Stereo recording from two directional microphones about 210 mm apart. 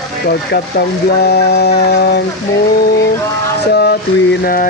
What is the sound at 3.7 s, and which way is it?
Speech, 50° left (ahead or behind).